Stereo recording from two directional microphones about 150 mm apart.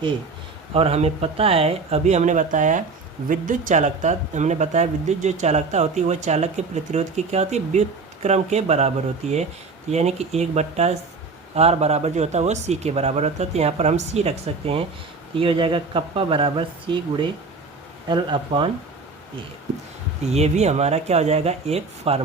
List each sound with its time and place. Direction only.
0.7 s speech: 40° right (ahead or behind)
20.3 s speech: 45° right (ahead or behind)